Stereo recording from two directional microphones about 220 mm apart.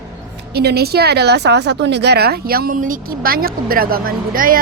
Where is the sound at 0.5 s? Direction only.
45° right (ahead or behind).